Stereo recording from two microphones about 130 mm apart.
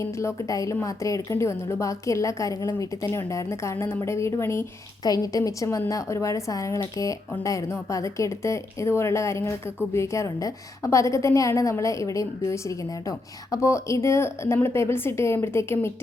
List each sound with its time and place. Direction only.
0.0 s a woman's voice: 20° left (ahead or behind)